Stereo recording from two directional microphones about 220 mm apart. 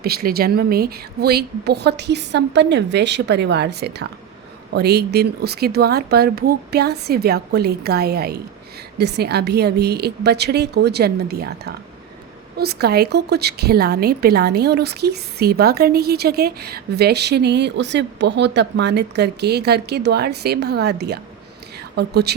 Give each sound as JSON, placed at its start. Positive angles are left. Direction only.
{"t": 0.0, "sound": "a woman's voice", "side_deg": -45}